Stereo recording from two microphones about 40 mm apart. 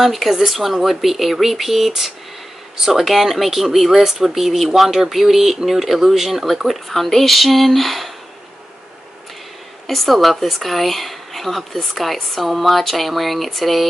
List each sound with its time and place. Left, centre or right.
0.0 s speech: centre
9.8 s speech: centre